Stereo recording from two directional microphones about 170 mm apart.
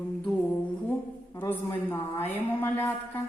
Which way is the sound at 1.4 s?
10° left (ahead or behind).